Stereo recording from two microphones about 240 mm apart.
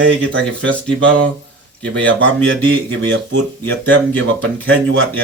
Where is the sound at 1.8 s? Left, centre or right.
Right.